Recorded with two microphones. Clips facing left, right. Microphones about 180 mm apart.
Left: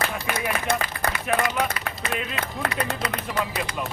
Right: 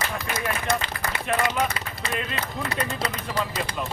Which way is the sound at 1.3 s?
65° left (ahead or behind).